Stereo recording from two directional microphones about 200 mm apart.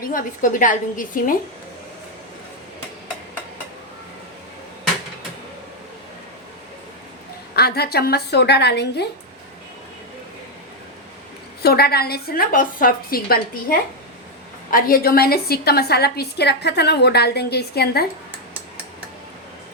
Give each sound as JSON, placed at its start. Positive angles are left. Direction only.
{"t": 0.1, "sound": "a woman's voice", "side_deg": 40}
{"t": 7.5, "sound": "a woman's voice", "side_deg": 50}
{"t": 11.6, "sound": "a woman's voice", "side_deg": 50}